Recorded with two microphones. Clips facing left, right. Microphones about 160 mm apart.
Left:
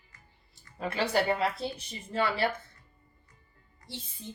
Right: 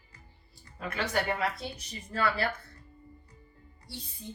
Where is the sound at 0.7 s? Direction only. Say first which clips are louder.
Left 3 dB; 30° left (ahead or behind).